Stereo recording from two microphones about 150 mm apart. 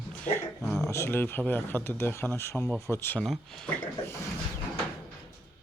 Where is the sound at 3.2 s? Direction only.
5° left (ahead or behind).